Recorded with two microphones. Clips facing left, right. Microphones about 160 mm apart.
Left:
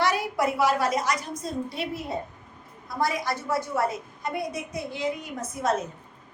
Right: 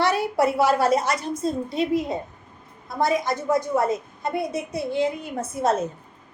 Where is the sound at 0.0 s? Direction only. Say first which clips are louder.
Right 4 dB; 30° right (ahead or behind).